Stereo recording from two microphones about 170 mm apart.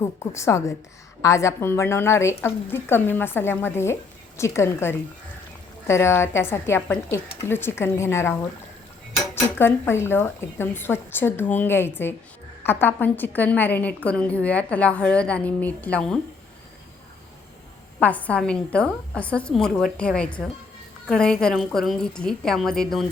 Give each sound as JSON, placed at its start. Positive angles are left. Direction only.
{"t": 0.0, "sound": "a woman's voice", "side_deg": 15}
{"t": 18.0, "sound": "a woman's voice", "side_deg": 10}